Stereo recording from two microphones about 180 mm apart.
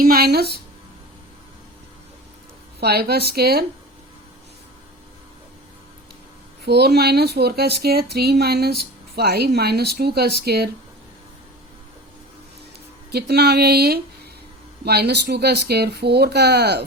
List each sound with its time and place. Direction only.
0.0 s speech: 55° right (ahead or behind)
2.8 s speech: 60° right (ahead or behind)
6.7 s speech: 65° right (ahead or behind)
13.1 s speech: 65° right (ahead or behind)